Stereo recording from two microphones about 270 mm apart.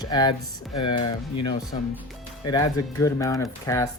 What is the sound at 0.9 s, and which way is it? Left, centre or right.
Speech, left.